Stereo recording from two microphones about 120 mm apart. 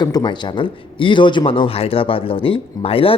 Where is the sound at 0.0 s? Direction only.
35° left (ahead or behind).